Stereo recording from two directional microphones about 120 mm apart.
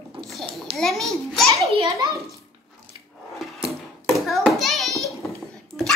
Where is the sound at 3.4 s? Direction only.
5° right (ahead or behind).